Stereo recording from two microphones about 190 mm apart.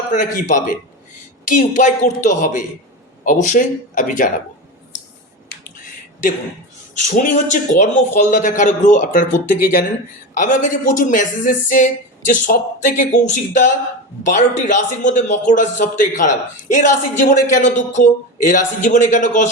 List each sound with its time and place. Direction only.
0.1 s a man's voice: 40° left (ahead or behind)
7.2 s a man's voice: 40° left (ahead or behind)